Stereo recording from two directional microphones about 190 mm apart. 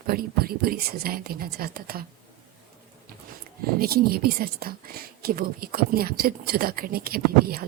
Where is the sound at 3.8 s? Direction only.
50° right (ahead or behind).